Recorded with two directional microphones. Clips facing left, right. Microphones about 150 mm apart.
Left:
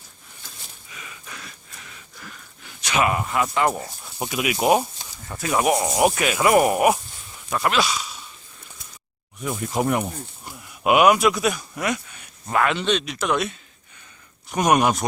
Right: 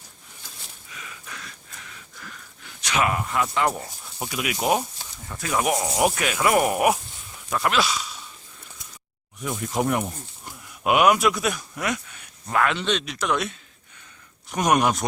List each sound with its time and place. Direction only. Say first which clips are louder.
0.4 s a sound: left 1 dB; 5° left (ahead or behind)
2.6 s speech: left 2 dB; 10° left (ahead or behind)
3.8 s speech: left 3 dB; 20° left (ahead or behind); by 8.1 s centre (ahead or behind)
9.4 s speech: left 1 dB; centre (ahead or behind)